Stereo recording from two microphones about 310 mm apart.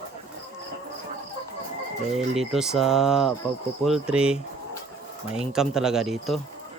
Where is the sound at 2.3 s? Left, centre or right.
Centre.